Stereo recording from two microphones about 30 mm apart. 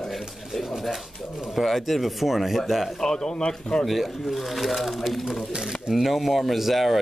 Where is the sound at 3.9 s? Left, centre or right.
Centre.